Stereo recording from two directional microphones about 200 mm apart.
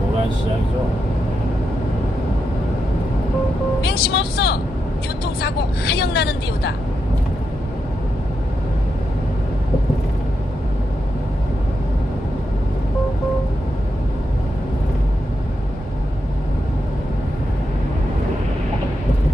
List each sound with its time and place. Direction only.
3.8 s speech: 55° left (ahead or behind)